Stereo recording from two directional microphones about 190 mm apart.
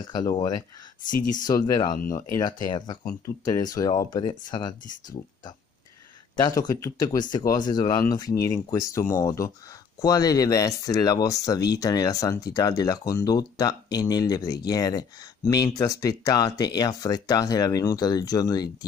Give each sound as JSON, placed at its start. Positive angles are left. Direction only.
{"t": 0.0, "sound": "speech", "side_deg": 20}
{"t": 1.1, "sound": "speech", "side_deg": 45}
{"t": 2.1, "sound": "speech", "side_deg": 20}
{"t": 6.3, "sound": "speech", "side_deg": 20}